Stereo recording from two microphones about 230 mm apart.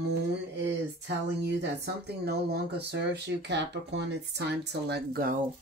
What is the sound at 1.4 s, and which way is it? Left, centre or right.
Speech, right.